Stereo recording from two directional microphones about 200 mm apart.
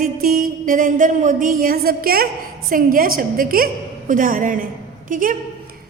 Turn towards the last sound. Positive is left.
turn(degrees=-45)  # may be behind; listen again after turning